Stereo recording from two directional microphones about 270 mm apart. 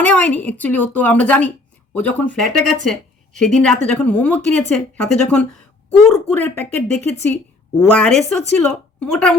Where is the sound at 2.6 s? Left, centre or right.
Right.